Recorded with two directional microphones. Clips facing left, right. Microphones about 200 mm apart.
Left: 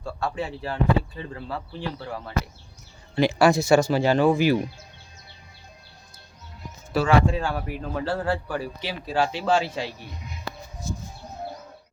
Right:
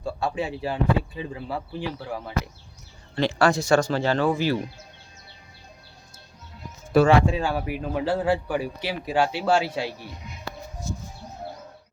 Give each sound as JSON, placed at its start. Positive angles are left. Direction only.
{"t": 0.0, "sound": "speech", "side_deg": -10}
{"t": 3.2, "sound": "speech", "side_deg": 10}
{"t": 6.9, "sound": "speech", "side_deg": -55}
{"t": 7.3, "sound": "speech", "side_deg": -5}